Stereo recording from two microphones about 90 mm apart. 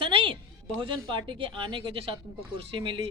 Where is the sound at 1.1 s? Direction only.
65° right (ahead or behind); by 2.2 s 85° right.